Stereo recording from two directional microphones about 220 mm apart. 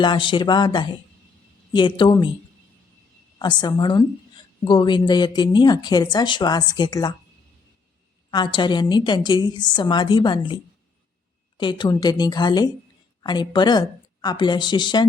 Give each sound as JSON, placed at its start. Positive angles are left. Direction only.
{"t": 0.0, "sound": "speech", "side_deg": 20}
{"t": 3.3, "sound": "speech", "side_deg": 20}
{"t": 8.3, "sound": "speech", "side_deg": 20}